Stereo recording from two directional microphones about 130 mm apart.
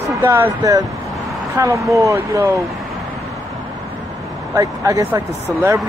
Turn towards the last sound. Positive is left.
turn(degrees=-25)  # may be behind; listen again after turning